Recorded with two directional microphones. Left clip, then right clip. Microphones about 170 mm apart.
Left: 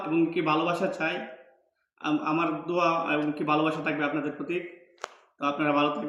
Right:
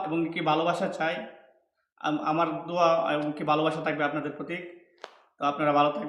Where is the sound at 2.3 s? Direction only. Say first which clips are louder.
Right 2 dB; 20° right (ahead or behind).